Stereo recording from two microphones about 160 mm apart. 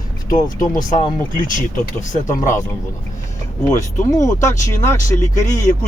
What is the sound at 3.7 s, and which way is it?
Speech, 20° left (ahead or behind).